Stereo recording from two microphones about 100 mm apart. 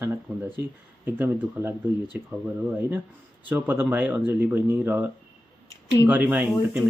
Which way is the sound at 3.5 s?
20° right (ahead or behind).